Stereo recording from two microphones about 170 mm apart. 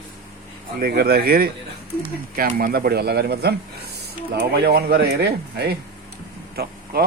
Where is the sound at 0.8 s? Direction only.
65° right (ahead or behind).